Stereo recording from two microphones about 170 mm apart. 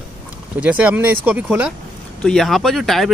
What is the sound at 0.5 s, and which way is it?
Speech, 10° right (ahead or behind).